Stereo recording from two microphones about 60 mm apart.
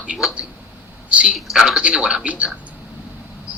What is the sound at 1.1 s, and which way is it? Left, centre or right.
Speech, centre.